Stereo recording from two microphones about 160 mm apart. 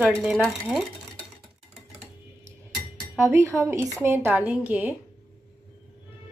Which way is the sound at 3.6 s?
15° right (ahead or behind).